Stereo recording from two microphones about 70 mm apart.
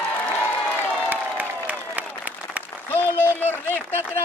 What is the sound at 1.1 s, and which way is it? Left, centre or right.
Applause, right.